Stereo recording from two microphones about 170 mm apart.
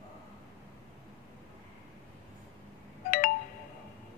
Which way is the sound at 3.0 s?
55° left (ahead or behind).